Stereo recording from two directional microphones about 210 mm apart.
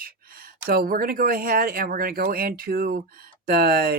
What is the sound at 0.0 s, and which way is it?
Speech, 45° right (ahead or behind).